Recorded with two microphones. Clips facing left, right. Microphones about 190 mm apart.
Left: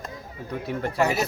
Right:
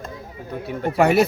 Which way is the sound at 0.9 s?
65° right (ahead or behind).